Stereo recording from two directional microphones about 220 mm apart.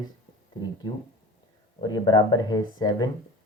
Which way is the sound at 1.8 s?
20° left (ahead or behind).